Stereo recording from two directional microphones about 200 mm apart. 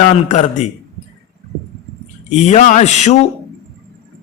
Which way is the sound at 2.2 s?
35° left (ahead or behind).